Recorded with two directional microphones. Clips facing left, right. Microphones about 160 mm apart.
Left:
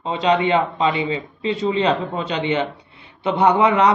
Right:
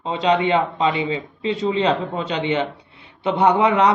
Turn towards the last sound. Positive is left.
turn(degrees=-25)  # may be behind; listen again after turning